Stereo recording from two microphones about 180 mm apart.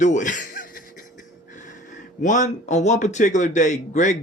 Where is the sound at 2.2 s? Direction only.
45° left (ahead or behind).